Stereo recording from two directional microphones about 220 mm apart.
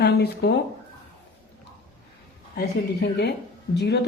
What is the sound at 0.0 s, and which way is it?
Speech, 45° left (ahead or behind).